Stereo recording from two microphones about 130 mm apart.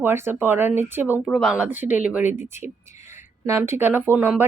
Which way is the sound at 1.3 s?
Centre (ahead or behind).